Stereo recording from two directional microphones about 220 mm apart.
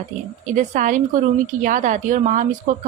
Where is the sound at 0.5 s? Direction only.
35° right (ahead or behind).